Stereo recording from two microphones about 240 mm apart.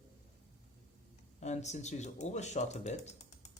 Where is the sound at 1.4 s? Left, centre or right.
Left.